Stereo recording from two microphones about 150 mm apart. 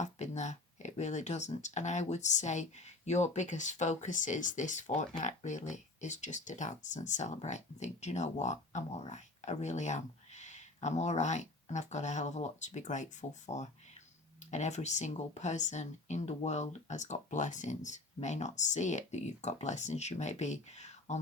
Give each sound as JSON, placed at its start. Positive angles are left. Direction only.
{"t": 0.0, "sound": "speech", "side_deg": 50}